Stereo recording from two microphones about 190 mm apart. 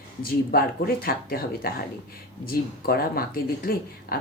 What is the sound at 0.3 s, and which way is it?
Speech, 55° left (ahead or behind).